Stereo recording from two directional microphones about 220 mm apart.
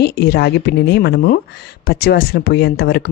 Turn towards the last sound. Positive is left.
turn(degrees=45)  # may be behind; listen again after turning